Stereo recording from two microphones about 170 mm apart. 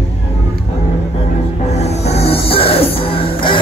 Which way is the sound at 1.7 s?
40° left (ahead or behind).